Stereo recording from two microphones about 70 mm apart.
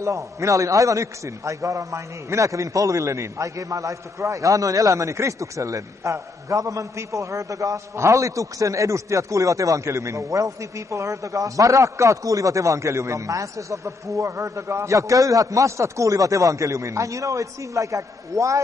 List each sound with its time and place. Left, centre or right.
0.0 s a man's voice: right